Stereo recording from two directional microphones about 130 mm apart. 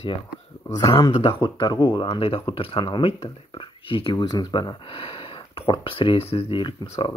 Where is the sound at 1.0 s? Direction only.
35° left (ahead or behind).